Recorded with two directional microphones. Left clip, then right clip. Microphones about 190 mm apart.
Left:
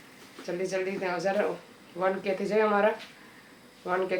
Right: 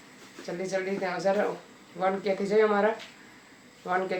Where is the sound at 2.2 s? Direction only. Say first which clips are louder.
Right 4 dB; 10° right (ahead or behind).